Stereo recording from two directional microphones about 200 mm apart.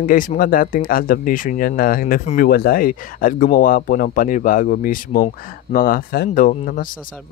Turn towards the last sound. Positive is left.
turn(degrees=40)  # may be behind; listen again after turning